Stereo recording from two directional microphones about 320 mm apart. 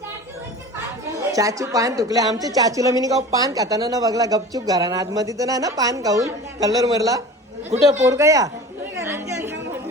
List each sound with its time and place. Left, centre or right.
1.3 s a woman's voice: centre
8.0 s a woman's voice: centre
9.0 s chatter: centre